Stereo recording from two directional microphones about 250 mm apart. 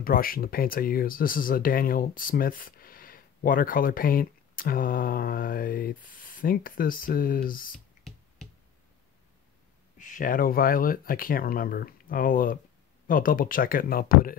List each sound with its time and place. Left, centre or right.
0.0 s speech: left
9.9 s speech: left